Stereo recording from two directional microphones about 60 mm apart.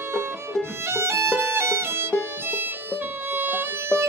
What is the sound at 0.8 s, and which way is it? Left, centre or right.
Music, right.